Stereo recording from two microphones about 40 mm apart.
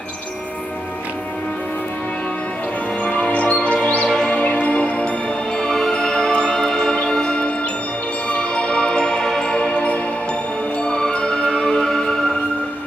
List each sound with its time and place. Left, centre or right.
3.0 s music: left
5.6 s music: centre